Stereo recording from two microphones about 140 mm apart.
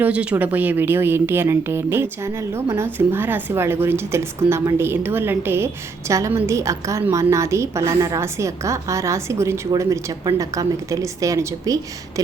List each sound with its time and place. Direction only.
0.0 s a woman's voice: 10° right (ahead or behind); by 12.2 s 25° right (ahead or behind)